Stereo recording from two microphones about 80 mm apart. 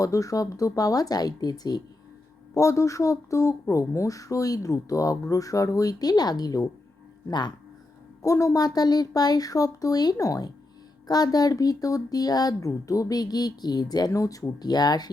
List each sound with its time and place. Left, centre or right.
0.0 s speech: left
2.6 s speech: left
7.3 s speech: left
8.2 s speech: left
14.1 s speech: left